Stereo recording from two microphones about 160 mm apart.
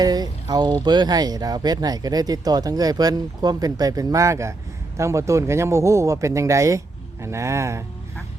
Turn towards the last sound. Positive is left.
turn(degrees=-20)  # may be behind; listen again after turning